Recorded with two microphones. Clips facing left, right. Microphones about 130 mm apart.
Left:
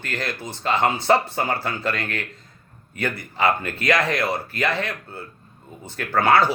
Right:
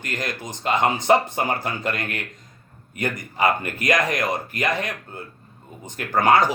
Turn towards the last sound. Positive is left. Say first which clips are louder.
# even
turn(degrees=-15)  # may be behind; listen again after turning